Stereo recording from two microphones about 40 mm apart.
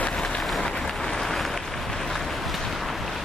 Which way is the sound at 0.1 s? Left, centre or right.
Left.